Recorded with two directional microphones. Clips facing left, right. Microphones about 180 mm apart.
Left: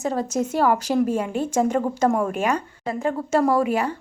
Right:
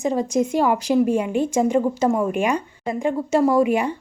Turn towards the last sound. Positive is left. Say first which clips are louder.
# right 3 dB
turn(degrees=-15)  # may be behind; listen again after turning